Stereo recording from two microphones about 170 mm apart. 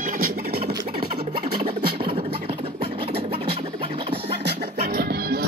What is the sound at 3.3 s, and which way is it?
Scratching, 30° right (ahead or behind).